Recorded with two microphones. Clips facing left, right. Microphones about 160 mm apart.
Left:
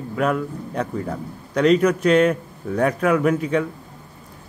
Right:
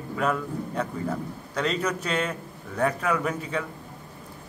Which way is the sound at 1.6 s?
10° left (ahead or behind).